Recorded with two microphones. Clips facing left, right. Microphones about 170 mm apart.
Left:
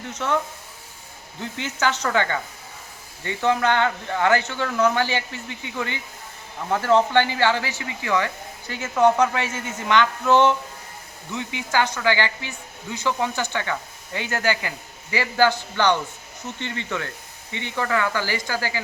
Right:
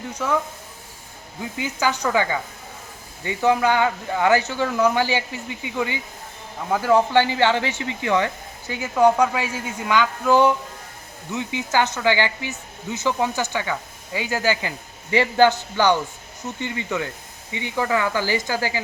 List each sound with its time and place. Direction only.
0.1 s speech: 5° right (ahead or behind)
1.4 s a man's voice: 10° right (ahead or behind)
15.7 s speech: 10° right (ahead or behind)